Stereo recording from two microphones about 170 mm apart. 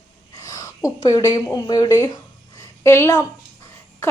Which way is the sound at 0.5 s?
20° left (ahead or behind).